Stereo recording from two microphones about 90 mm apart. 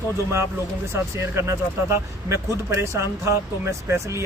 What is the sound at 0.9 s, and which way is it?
Speech, 30° right (ahead or behind).